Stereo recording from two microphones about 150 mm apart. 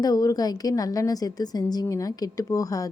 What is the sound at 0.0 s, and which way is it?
A woman's voice, 25° left (ahead or behind).